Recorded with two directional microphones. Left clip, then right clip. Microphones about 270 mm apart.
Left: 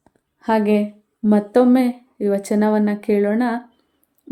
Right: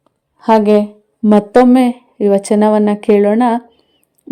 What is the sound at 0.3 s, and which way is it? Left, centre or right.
Speech, right.